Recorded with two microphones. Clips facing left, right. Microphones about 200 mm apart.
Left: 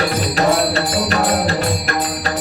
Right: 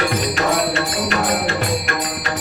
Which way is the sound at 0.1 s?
35° left (ahead or behind).